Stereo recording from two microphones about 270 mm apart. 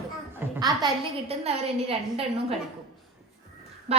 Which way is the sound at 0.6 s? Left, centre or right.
Centre.